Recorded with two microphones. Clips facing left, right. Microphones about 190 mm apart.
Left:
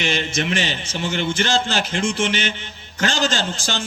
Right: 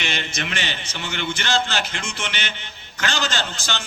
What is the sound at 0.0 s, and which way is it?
A man's voice, 40° left (ahead or behind).